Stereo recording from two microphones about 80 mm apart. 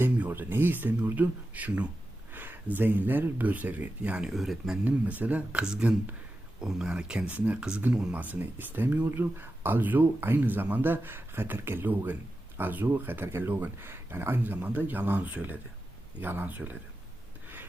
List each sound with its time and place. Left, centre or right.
0.0 s speech: right
4.4 s speech: centre
4.9 s speech: centre
8.2 s speech: right